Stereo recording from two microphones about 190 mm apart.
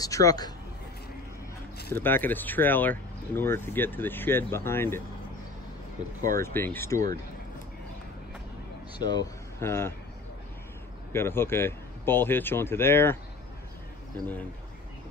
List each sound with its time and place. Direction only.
0.0 s speech: 20° left (ahead or behind)
2.0 s speech: 10° left (ahead or behind)
6.4 s speech: 10° left (ahead or behind)
9.0 s speech: 20° left (ahead or behind)
11.1 s speech: 10° left (ahead or behind)